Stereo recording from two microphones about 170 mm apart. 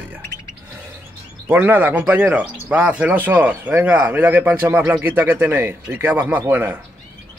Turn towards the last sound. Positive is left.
turn(degrees=-10)  # may be behind; listen again after turning